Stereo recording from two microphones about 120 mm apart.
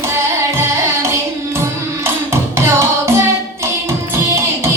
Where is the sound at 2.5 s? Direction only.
20° right (ahead or behind).